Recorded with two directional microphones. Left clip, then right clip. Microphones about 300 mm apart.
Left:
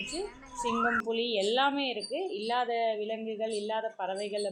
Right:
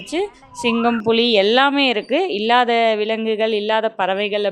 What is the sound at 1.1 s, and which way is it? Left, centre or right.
Speech, right.